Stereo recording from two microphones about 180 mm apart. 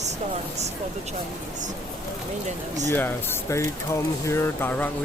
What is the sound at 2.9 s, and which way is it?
Speech, 10° left (ahead or behind).